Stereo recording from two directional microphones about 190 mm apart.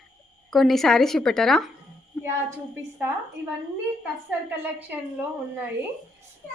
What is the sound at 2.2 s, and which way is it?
Speech, 15° right (ahead or behind).